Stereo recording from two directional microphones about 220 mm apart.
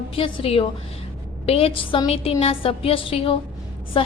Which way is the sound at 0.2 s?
25° left (ahead or behind).